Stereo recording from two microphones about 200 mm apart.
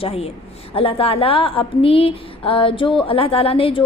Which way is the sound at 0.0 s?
30° left (ahead or behind).